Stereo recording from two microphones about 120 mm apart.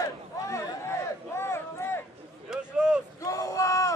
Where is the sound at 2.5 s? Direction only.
5° right (ahead or behind).